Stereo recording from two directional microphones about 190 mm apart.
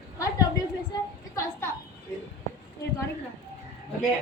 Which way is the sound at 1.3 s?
15° left (ahead or behind).